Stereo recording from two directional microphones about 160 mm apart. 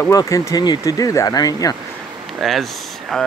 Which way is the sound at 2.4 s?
Centre (ahead or behind).